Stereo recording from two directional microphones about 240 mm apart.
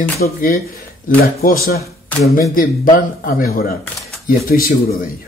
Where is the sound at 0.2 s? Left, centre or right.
Left.